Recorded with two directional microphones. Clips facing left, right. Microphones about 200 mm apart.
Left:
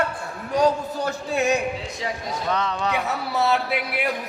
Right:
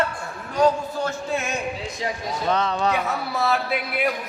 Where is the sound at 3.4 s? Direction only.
70° left (ahead or behind).